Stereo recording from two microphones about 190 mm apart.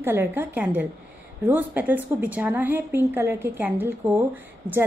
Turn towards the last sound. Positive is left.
turn(degrees=-10)  # may be behind; listen again after turning